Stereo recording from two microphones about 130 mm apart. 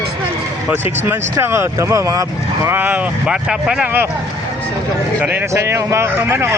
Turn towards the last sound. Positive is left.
turn(degrees=-20)  # may be behind; listen again after turning